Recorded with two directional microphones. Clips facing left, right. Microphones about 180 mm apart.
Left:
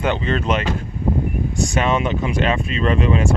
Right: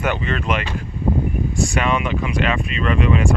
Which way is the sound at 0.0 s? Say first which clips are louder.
Left 2 dB; 25° left (ahead or behind).